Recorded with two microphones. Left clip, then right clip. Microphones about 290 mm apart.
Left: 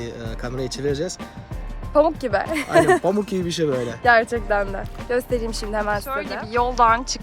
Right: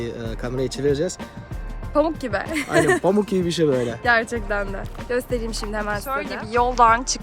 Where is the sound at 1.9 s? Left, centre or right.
Centre.